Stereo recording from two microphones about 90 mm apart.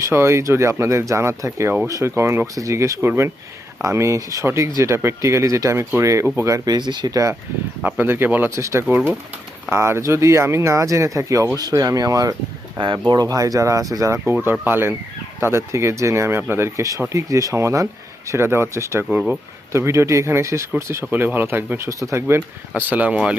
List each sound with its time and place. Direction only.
0.0 s speech: 30° right (ahead or behind)
6.7 s speech: 55° right (ahead or behind)
7.9 s speech: 25° right (ahead or behind)
14.6 s speech: 25° right (ahead or behind)
21.0 s speech: 20° right (ahead or behind)
22.4 s speech: 15° right (ahead or behind)